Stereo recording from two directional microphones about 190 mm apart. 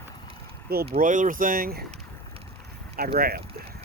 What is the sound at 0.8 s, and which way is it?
Speech, 40° right (ahead or behind).